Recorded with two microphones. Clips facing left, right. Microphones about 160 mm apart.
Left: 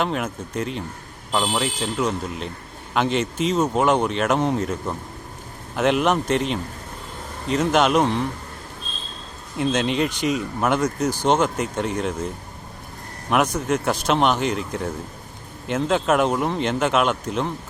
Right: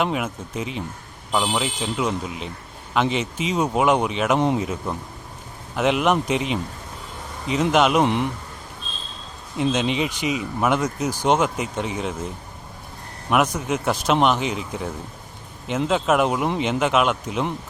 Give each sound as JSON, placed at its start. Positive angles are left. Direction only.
{"t": 0.0, "sound": "a man's voice", "side_deg": -5}
{"t": 8.0, "sound": "a man's voice", "side_deg": -15}
{"t": 9.6, "sound": "speech", "side_deg": 0}
{"t": 13.3, "sound": "speech", "side_deg": -5}